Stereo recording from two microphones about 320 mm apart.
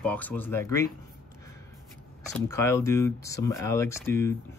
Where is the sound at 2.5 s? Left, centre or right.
Centre.